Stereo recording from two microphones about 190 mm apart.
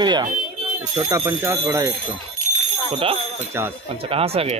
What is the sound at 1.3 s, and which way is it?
Speech, 10° right (ahead or behind).